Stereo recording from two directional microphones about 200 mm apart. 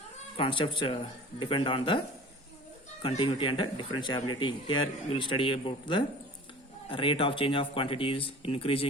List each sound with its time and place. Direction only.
0.3 s speech: 25° left (ahead or behind)
3.0 s speech: 25° left (ahead or behind)